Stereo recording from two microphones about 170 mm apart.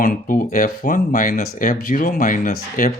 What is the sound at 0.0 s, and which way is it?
Speech, 55° left (ahead or behind).